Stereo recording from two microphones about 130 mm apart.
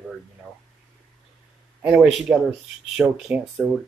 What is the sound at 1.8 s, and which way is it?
Speech, 10° right (ahead or behind).